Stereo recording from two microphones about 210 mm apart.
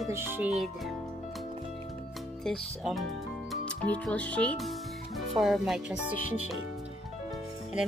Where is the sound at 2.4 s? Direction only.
Centre (ahead or behind).